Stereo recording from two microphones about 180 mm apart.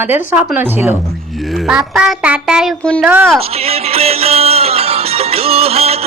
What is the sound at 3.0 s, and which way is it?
Speech, 10° right (ahead or behind).